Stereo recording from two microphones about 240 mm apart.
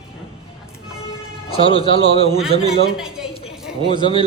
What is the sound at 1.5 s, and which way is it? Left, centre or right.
Speech, left.